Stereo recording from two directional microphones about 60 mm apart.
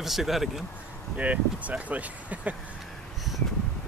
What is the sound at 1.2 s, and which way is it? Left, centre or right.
Speech, right.